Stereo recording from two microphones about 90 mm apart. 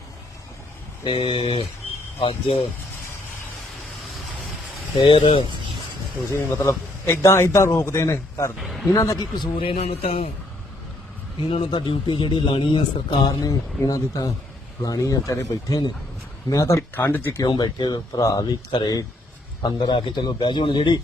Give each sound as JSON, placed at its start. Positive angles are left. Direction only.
{"t": 1.0, "sound": "a man's voice", "side_deg": 80}
{"t": 4.9, "sound": "speech", "side_deg": 80}
{"t": 6.3, "sound": "a man's voice", "side_deg": 30}
{"t": 8.6, "sound": "speech", "side_deg": 0}
{"t": 8.9, "sound": "a man's voice", "side_deg": 35}
{"t": 9.1, "sound": "speech", "side_deg": 50}
{"t": 9.6, "sound": "a man's voice", "side_deg": 90}
{"t": 11.4, "sound": "a man's voice", "side_deg": 75}
{"t": 13.4, "sound": "a man's voice", "side_deg": 45}
{"t": 16.9, "sound": "speech", "side_deg": 20}
{"t": 17.4, "sound": "speech", "side_deg": 55}
{"t": 19.6, "sound": "a man's voice", "side_deg": 65}